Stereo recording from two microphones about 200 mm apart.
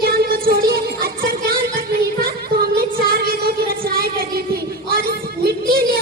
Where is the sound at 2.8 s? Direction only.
50° right (ahead or behind).